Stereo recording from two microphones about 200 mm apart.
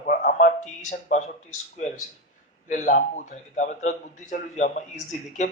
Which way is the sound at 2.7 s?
40° left (ahead or behind).